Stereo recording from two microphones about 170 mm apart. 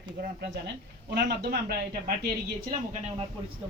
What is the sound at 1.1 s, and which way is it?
Speech, 70° right (ahead or behind).